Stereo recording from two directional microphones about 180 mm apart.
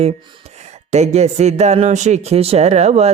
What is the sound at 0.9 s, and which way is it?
Speech, 40° right (ahead or behind).